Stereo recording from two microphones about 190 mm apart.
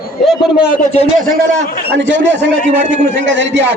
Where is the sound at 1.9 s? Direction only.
70° right (ahead or behind).